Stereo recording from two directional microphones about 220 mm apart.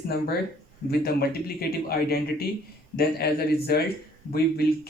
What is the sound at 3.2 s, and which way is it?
Speech, 45° left (ahead or behind).